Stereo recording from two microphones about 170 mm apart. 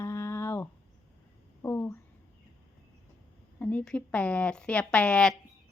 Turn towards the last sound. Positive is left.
turn(degrees=5)  # may be behind; listen again after turning